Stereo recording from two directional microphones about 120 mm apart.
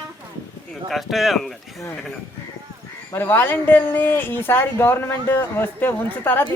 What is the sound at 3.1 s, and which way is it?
Speech, 20° left (ahead or behind).